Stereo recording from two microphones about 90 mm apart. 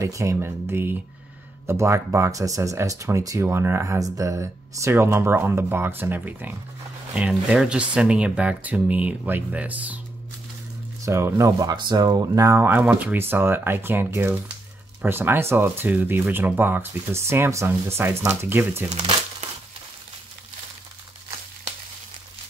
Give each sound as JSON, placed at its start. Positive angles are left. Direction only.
{"t": 0.0, "sound": "speech", "side_deg": -35}
{"t": 7.2, "sound": "speech", "side_deg": -10}
{"t": 11.1, "sound": "speech", "side_deg": -30}
{"t": 11.7, "sound": "speech", "side_deg": -55}
{"t": 12.4, "sound": "speech", "side_deg": -25}